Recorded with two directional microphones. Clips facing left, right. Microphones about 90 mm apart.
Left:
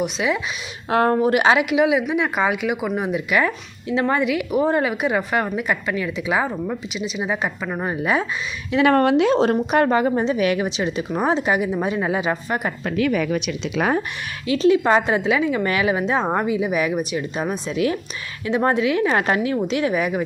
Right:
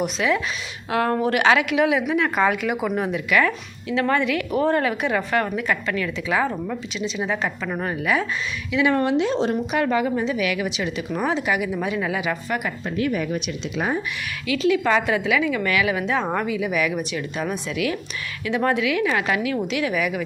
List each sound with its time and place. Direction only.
0.2 s speech: 15° left (ahead or behind)
0.9 s a woman's voice: 35° left (ahead or behind)
1.1 s speech: 15° left (ahead or behind)
3.2 s a woman's voice: 20° left (ahead or behind)
8.7 s a woman's voice: 55° left (ahead or behind); by 12.6 s 30° left (ahead or behind)
12.8 s speech: 90° left
14.4 s a woman's voice: 35° left (ahead or behind)